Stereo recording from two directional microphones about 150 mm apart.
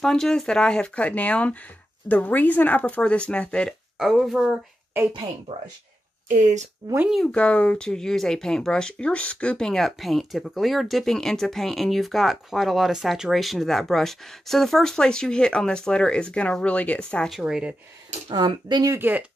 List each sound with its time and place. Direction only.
0.0 s speech: 5° left (ahead or behind)
6.2 s speech: 55° right (ahead or behind)
7.1 s speech: 5° left (ahead or behind)
17.4 s speech: 5° right (ahead or behind)
18.3 s speech: 30° right (ahead or behind)